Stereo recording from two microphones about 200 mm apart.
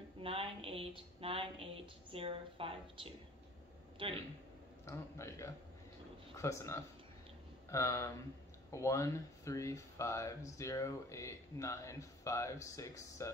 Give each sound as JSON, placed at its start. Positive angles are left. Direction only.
{"t": 0.2, "sound": "a woman's voice", "side_deg": -30}
{"t": 4.8, "sound": "speech", "side_deg": 15}